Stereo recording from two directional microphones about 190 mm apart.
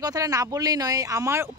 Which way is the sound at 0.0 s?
20° right (ahead or behind).